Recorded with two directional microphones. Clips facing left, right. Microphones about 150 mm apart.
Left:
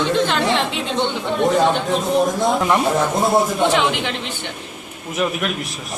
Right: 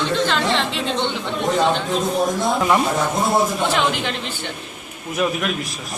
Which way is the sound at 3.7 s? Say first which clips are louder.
Left 2 dB; 15° left (ahead or behind).